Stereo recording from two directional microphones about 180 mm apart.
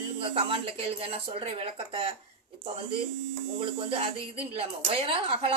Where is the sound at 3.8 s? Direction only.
30° right (ahead or behind).